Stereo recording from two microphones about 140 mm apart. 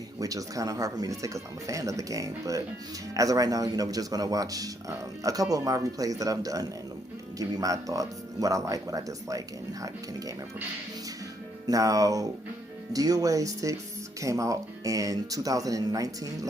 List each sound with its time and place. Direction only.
0.2 s speech: 25° right (ahead or behind)
11.6 s speech: 25° right (ahead or behind)